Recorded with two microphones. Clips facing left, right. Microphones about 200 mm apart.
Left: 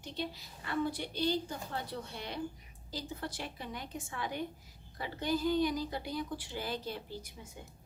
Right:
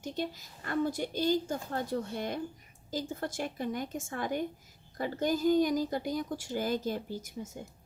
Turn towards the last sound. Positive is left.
turn(degrees=-45)  # may be behind; listen again after turning